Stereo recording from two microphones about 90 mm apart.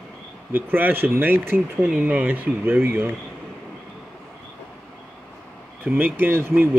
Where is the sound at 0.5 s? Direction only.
25° right (ahead or behind).